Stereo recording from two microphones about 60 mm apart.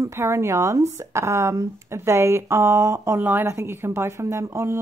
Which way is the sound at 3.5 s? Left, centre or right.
Right.